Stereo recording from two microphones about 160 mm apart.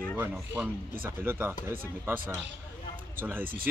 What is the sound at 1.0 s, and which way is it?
Speech, 15° right (ahead or behind).